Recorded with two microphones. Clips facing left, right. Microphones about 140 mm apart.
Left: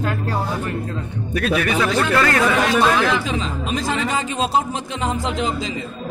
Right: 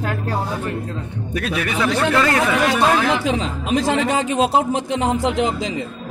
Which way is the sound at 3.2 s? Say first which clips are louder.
Right 3 dB; 70° right (ahead or behind).